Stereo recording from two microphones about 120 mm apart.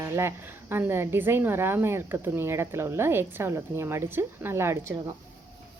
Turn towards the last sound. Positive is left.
turn(degrees=-20)  # may be behind; listen again after turning